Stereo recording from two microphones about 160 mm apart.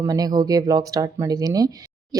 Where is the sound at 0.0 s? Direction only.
25° right (ahead or behind).